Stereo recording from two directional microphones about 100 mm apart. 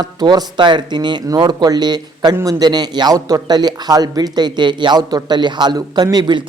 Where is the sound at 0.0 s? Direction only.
40° right (ahead or behind).